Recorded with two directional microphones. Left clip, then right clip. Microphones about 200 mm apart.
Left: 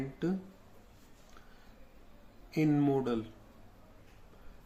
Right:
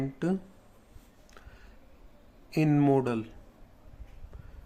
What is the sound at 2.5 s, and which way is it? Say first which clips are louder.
Speech: right 4 dB; 55° right (ahead or behind).